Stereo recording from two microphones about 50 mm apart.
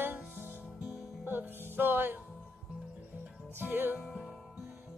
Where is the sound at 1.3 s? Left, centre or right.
Right.